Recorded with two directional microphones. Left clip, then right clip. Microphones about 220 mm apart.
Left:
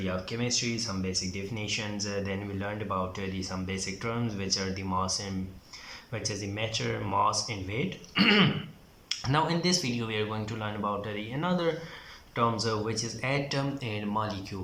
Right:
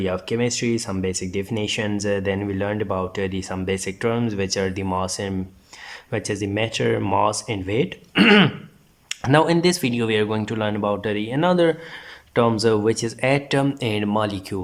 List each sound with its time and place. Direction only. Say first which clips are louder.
0.0 s speech: right 10 dB; 45° right (ahead or behind)